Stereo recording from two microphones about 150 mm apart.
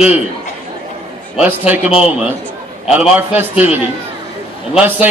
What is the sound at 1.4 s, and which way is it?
A man's voice, 10° right (ahead or behind).